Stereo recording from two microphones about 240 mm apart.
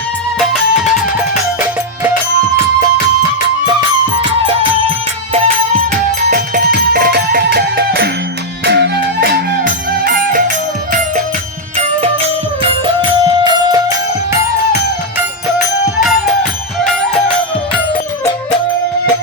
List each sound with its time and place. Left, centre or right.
5.3 s music: right
12.8 s music: centre
16.8 s music: centre